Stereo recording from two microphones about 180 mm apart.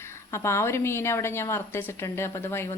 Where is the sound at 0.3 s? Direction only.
15° left (ahead or behind).